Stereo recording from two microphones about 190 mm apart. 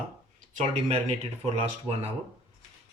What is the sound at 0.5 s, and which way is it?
Speech, 35° right (ahead or behind).